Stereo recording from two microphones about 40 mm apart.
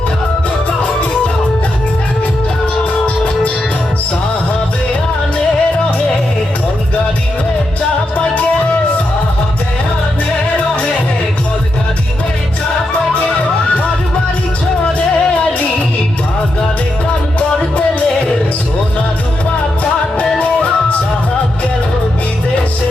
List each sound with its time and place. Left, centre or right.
12.9 s music: left
14.9 s music: left
17.7 s music: left
19.8 s music: left